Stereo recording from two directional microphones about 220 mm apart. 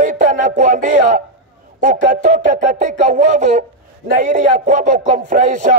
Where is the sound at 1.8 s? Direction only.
35° right (ahead or behind).